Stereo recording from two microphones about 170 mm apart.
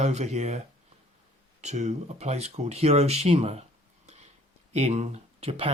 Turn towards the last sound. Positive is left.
turn(degrees=-35)  # may be behind; listen again after turning